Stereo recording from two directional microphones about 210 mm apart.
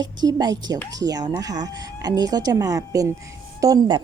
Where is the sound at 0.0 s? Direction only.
20° right (ahead or behind).